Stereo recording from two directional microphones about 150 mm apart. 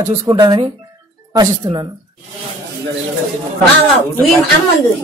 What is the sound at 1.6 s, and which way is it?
Speech, 30° right (ahead or behind).